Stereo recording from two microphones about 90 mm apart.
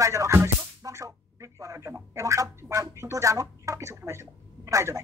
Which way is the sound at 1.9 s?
35° right (ahead or behind).